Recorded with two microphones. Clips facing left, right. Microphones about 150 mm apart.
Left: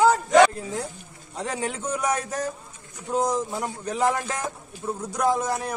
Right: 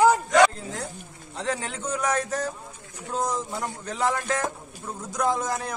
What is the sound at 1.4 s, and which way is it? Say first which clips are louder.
A man's voice: left 1 dB; 10° left (ahead or behind).